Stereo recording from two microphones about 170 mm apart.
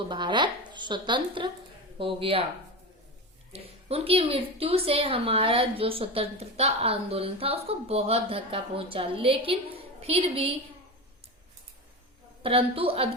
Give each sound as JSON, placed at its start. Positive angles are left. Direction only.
{"t": 0.1, "sound": "a woman's voice", "side_deg": -25}
{"t": 3.5, "sound": "a woman's voice", "side_deg": -35}
{"t": 12.4, "sound": "a woman's voice", "side_deg": -35}